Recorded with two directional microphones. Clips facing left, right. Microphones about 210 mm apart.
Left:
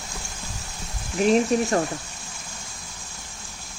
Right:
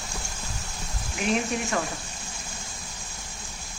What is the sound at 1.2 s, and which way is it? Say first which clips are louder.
Speech: left 7 dB; 40° left (ahead or behind).